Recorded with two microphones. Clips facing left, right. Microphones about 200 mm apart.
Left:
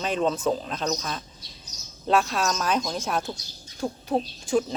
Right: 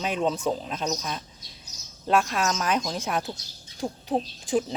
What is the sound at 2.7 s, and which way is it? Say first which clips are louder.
Speech: left 1 dB; 15° right (ahead or behind).